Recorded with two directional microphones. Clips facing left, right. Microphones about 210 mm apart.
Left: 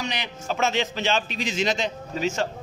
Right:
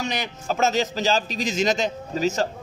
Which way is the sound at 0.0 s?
45° right (ahead or behind).